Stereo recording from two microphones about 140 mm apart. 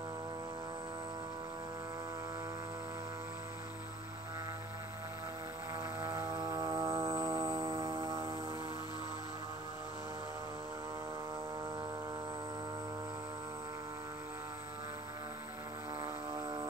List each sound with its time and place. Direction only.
6.0 s music: 20° right (ahead or behind)
16.0 s vehicle: 30° right (ahead or behind)